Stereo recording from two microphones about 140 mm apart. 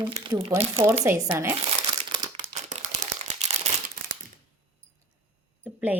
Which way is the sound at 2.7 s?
55° right (ahead or behind).